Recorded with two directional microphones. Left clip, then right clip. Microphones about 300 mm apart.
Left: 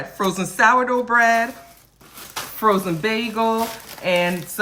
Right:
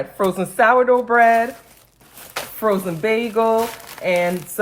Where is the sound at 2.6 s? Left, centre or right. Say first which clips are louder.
Left 1 dB; centre.